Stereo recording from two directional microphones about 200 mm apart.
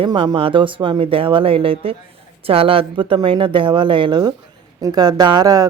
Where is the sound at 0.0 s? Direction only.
25° right (ahead or behind).